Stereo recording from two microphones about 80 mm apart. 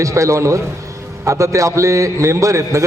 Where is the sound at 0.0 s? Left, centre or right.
Right.